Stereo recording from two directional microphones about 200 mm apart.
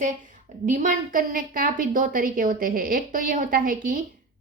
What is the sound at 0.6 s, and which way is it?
A woman's voice, 40° right (ahead or behind).